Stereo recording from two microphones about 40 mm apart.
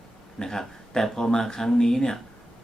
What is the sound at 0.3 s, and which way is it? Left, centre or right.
A man's voice, centre.